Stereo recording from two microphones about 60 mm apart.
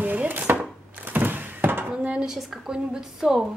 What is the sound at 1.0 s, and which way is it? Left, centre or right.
Thunk, right.